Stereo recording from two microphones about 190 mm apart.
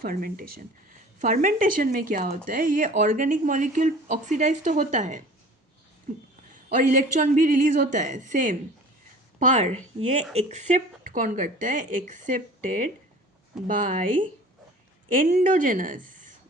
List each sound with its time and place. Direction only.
0.0 s speech: 50° right (ahead or behind)
6.5 s a woman's voice: 45° right (ahead or behind)